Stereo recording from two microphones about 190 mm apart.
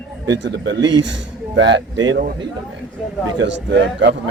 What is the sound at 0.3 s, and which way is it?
Speech, 70° right (ahead or behind).